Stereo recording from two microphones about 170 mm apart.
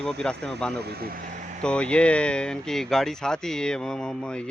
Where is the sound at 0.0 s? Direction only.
5° left (ahead or behind).